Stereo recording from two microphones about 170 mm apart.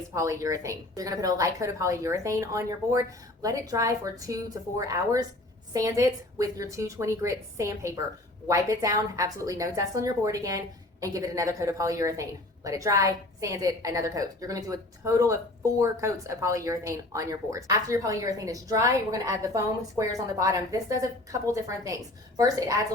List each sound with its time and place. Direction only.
0.1 s a woman's voice: 15° right (ahead or behind)